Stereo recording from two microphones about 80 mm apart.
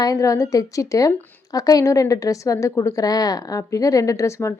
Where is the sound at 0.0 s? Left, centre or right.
Left.